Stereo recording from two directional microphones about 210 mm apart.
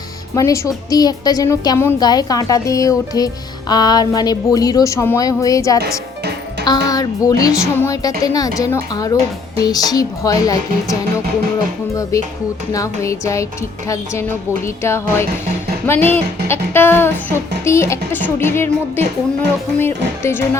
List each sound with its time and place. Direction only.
0.3 s a woman's voice: 15° left (ahead or behind)
12.1 s a woman's voice: 15° left (ahead or behind)
20.2 s a woman's voice: 10° left (ahead or behind)